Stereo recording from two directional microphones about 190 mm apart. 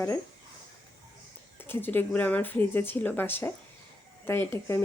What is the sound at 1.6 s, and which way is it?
Speech, 10° left (ahead or behind).